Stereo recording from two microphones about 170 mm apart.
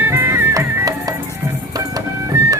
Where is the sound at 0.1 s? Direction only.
15° right (ahead or behind).